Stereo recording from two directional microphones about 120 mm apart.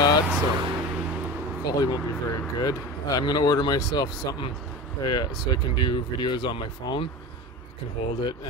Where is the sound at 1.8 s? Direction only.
35° left (ahead or behind).